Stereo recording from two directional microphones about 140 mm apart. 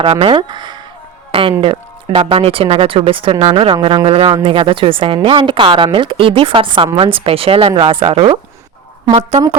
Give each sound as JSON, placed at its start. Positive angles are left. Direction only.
{"t": 0.0, "sound": "speech", "side_deg": -40}